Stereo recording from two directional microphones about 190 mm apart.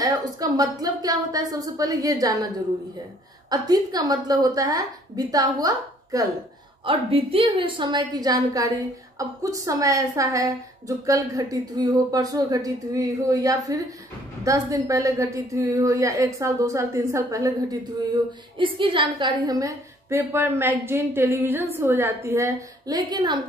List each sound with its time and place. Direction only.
0.0 s a woman's voice: 20° right (ahead or behind)
3.4 s a woman's voice: 20° right (ahead or behind)
6.8 s a woman's voice: 30° right (ahead or behind)